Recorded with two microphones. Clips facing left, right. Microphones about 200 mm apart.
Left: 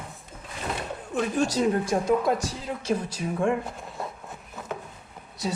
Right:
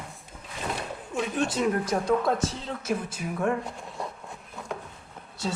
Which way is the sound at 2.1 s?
Centre (ahead or behind).